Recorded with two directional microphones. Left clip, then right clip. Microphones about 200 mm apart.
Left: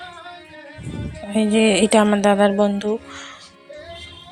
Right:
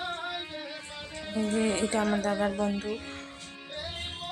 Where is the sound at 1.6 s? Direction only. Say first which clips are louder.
Left 14 dB; 40° left (ahead or behind).